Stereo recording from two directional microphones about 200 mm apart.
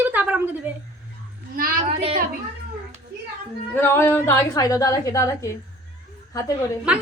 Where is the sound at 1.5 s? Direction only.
45° right (ahead or behind).